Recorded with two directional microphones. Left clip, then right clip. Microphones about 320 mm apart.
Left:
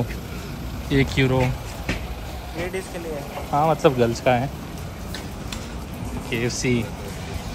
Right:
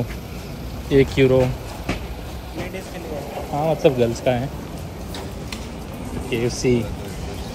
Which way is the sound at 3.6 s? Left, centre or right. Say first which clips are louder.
Right 2 dB; centre.